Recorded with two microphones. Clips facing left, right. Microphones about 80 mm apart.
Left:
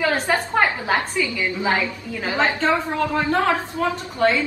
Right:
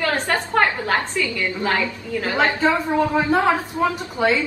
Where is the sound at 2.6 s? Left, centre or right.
Centre.